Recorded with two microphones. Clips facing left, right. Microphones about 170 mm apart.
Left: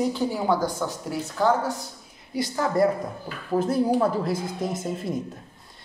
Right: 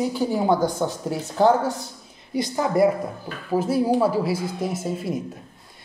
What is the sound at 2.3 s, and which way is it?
Speech, 15° right (ahead or behind).